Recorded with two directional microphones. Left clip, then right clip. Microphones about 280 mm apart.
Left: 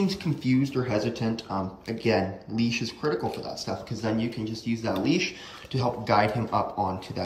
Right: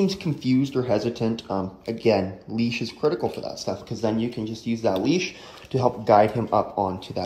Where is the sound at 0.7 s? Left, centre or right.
Centre.